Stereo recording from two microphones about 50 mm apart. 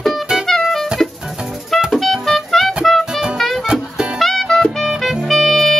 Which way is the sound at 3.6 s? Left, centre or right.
Centre.